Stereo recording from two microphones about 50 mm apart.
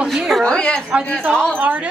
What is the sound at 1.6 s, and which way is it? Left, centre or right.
Speech, right.